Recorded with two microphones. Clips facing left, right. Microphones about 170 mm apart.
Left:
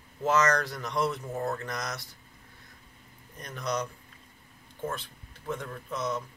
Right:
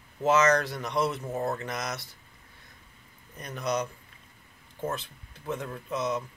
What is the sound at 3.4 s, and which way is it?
Speech, 5° right (ahead or behind).